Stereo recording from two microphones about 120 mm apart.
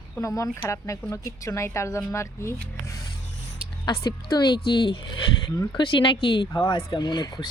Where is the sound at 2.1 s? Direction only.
25° left (ahead or behind).